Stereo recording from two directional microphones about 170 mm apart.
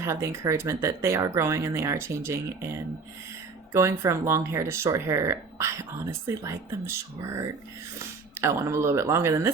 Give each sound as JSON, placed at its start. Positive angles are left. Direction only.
{"t": 0.0, "sound": "speech", "side_deg": -15}